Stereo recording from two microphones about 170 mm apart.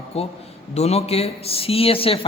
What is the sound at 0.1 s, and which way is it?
A man's voice, 35° left (ahead or behind).